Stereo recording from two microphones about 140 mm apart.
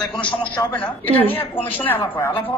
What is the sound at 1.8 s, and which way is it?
Speech, 15° left (ahead or behind).